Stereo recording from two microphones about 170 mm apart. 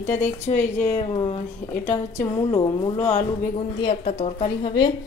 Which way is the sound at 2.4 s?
25° left (ahead or behind).